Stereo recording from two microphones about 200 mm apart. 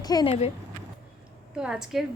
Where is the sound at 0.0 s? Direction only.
20° left (ahead or behind).